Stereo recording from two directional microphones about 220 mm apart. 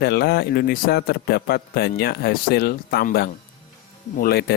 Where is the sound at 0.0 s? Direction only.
45° left (ahead or behind).